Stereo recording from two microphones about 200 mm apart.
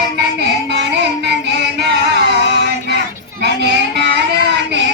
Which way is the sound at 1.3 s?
55° right (ahead or behind).